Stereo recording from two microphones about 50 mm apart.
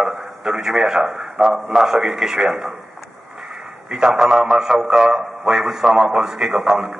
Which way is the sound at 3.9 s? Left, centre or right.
Centre.